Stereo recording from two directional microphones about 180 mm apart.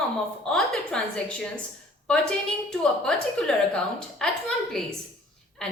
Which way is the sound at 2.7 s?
Centre (ahead or behind).